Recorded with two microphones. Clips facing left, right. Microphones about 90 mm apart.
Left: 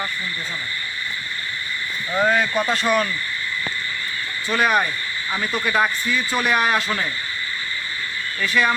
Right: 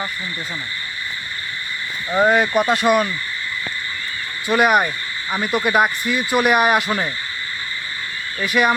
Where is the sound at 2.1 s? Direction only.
20° right (ahead or behind).